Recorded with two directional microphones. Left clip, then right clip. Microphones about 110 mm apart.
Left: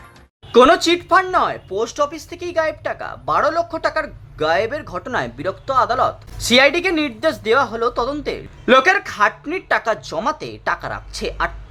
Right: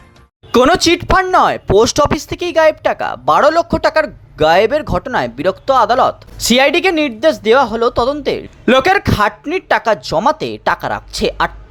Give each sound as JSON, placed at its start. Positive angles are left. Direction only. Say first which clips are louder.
{"t": 0.5, "sound": "speech", "louder": "right 1 dB", "side_deg": -90}
{"t": 0.8, "sound": "speech", "louder": "right 3 dB", "side_deg": -55}
{"t": 5.0, "sound": "speech", "louder": "right 7 dB", "side_deg": -40}
{"t": 8.6, "sound": "speech", "louder": "right 2 dB", "side_deg": -55}
{"t": 9.5, "sound": "speech", "louder": "right 5 dB", "side_deg": -45}
{"t": 10.2, "sound": "speech", "louder": "right 6 dB", "side_deg": -50}